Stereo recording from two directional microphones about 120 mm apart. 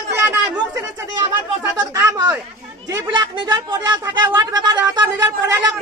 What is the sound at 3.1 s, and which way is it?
Speech, 40° right (ahead or behind).